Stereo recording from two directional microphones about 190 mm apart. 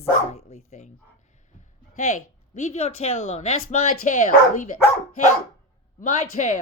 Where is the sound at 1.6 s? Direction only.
35° left (ahead or behind).